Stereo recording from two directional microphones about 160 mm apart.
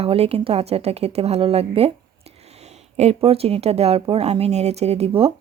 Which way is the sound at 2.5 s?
40° right (ahead or behind).